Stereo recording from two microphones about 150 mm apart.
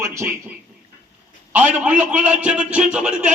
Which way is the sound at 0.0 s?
20° right (ahead or behind).